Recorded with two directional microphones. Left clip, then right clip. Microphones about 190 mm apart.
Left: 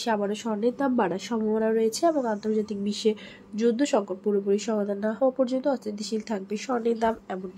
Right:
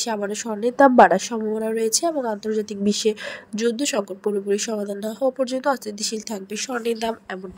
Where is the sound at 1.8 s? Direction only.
40° right (ahead or behind).